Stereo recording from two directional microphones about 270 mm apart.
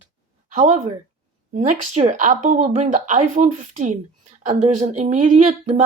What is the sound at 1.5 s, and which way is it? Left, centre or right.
Speech, right.